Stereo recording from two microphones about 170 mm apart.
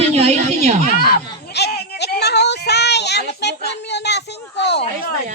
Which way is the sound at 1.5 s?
70° left (ahead or behind).